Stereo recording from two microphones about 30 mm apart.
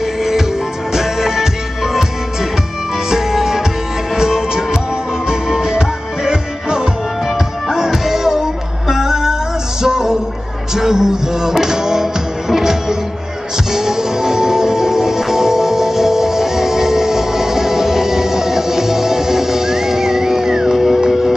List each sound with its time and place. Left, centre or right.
0.2 s music: centre
3.1 s music: centre
7.7 s music: centre
20.7 s music: centre